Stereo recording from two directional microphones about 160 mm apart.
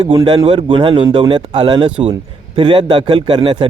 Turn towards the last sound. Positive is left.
turn(degrees=-35)  # may be behind; listen again after turning